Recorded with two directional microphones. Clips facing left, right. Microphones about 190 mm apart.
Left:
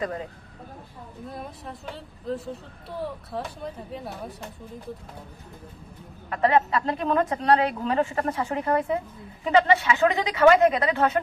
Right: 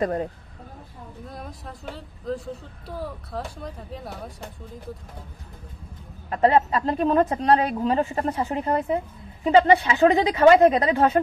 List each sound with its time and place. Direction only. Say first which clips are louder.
0.0 s speech: right 6 dB; 45° right (ahead or behind)
1.3 s speech: left 2 dB; centre (ahead or behind)
6.3 s a woman's voice: right 2 dB; 30° right (ahead or behind)